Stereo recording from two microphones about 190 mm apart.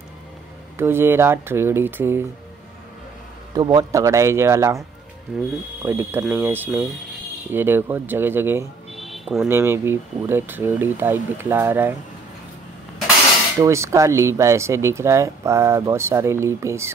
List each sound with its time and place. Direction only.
0.7 s speech: 10° right (ahead or behind)
3.5 s speech: 20° right (ahead or behind)
5.3 s speech: centre (ahead or behind)
5.8 s speech: 15° right (ahead or behind)
8.9 s a sound: centre (ahead or behind)
9.5 s speech: 15° right (ahead or behind)
13.6 s speech: 15° right (ahead or behind)